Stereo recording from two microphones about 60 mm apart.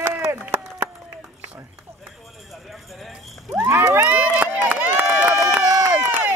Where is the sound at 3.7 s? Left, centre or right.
Right.